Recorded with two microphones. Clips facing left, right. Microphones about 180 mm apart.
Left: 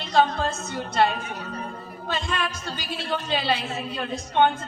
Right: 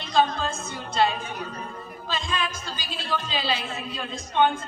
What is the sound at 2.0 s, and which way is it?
A woman's voice, 65° left (ahead or behind).